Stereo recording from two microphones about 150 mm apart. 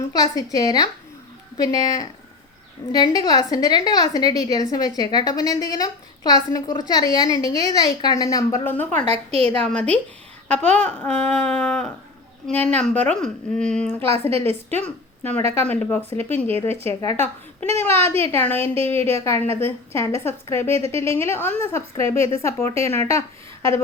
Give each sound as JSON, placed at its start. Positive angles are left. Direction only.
{"t": 0.1, "sound": "a woman's voice", "side_deg": 25}
{"t": 8.9, "sound": "a woman's voice", "side_deg": -50}
{"t": 10.5, "sound": "a woman's voice", "side_deg": -50}
{"t": 10.8, "sound": "a woman's voice", "side_deg": 10}
{"t": 14.1, "sound": "a woman's voice", "side_deg": -40}
{"t": 14.8, "sound": "a woman's voice", "side_deg": 10}